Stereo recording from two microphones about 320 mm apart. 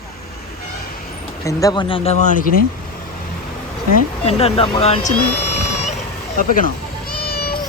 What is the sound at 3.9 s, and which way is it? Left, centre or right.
Speech, centre.